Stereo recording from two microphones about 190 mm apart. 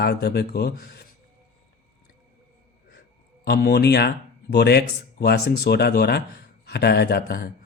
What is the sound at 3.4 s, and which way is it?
A man's voice, 55° left (ahead or behind).